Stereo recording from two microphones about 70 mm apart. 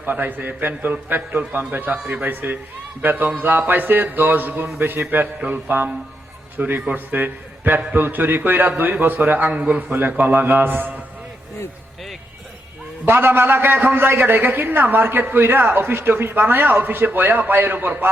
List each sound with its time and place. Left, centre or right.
0.0 s a man's voice: right
13.1 s a man's voice: right